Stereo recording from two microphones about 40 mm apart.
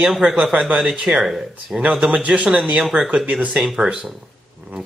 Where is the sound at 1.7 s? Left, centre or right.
Centre.